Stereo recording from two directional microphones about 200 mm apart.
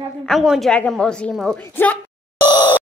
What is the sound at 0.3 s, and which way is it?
A woman's voice, centre (ahead or behind).